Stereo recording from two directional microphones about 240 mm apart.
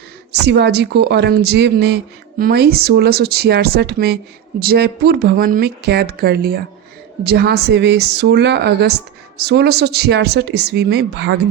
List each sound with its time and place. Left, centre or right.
0.4 s speech: right